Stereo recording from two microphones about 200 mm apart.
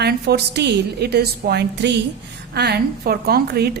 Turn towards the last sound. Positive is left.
turn(degrees=-50)  # may be behind; listen again after turning